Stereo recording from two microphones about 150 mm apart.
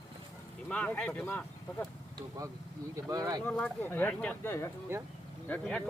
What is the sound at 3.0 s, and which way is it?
Speech, 25° right (ahead or behind).